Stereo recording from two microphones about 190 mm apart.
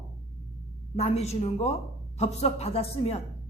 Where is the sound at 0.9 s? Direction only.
35° left (ahead or behind).